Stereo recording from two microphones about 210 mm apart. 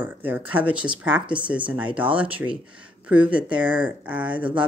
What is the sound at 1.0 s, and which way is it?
Speech, 5° right (ahead or behind).